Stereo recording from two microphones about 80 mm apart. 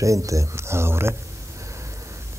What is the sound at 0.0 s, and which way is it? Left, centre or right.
Speech, right.